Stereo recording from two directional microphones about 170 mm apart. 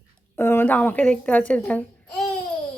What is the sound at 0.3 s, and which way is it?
A woman's voice, 15° left (ahead or behind).